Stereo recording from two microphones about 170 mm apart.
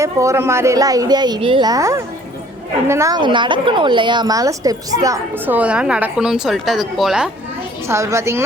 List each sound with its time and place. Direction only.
0.0 s a woman's voice: 15° right (ahead or behind); by 7.3 s centre (ahead or behind)
7.9 s a woman's voice: 15° right (ahead or behind)